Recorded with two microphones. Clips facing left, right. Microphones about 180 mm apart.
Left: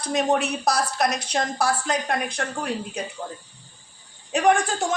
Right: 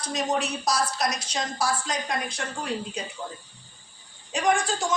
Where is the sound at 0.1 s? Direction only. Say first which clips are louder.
Left 5 dB; 60° left (ahead or behind).